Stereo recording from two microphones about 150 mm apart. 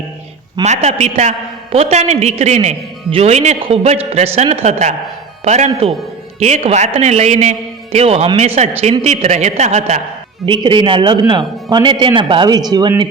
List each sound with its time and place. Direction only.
0.6 s a woman's voice: 50° right (ahead or behind)
10.4 s a man's voice: 30° right (ahead or behind)